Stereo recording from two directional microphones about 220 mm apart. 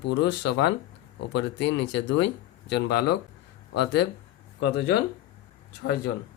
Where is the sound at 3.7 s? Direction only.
50° left (ahead or behind).